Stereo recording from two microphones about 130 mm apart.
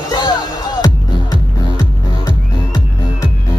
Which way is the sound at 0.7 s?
30° left (ahead or behind).